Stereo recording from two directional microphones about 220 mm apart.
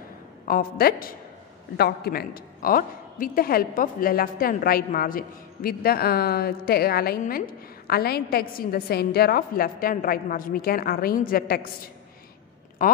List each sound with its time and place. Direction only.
0.5 s a woman's voice: 40° left (ahead or behind)